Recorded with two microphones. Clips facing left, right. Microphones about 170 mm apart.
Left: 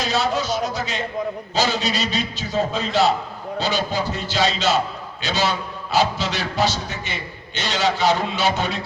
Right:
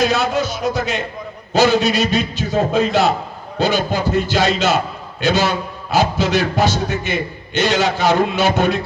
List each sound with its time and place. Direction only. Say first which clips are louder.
0.0 s a man's voice: right 5 dB; 55° right (ahead or behind)